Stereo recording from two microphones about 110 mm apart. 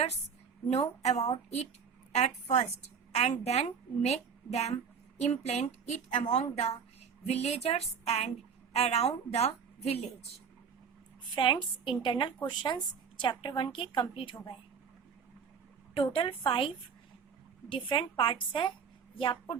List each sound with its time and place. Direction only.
0.7 s a woman's voice: 75° left (ahead or behind)
2.1 s a woman's voice: 90° left
6.2 s a woman's voice: 90° left
7.3 s a woman's voice: 80° left
11.3 s a woman's voice: 50° left (ahead or behind)
16.0 s a woman's voice: 55° left (ahead or behind)